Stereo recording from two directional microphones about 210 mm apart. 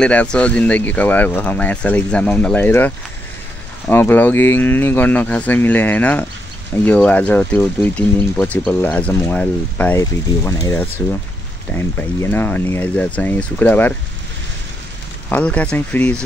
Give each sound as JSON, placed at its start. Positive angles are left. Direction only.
{"t": 0.0, "sound": "speech", "side_deg": 5}
{"t": 3.9, "sound": "speech", "side_deg": 10}
{"t": 15.2, "sound": "speech", "side_deg": 5}